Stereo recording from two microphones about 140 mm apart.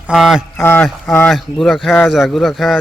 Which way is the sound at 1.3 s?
Centre (ahead or behind).